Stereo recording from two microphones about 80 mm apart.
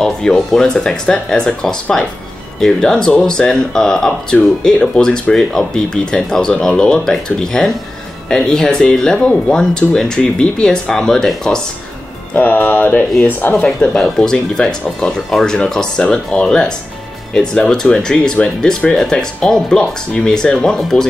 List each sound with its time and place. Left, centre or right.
0.0 s speech: centre
12.4 s speech: left
13.7 s speech: centre